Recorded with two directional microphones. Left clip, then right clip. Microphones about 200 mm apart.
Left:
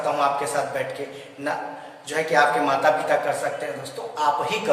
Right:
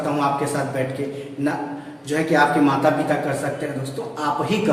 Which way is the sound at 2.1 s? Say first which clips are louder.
Right 1 dB; 20° left (ahead or behind).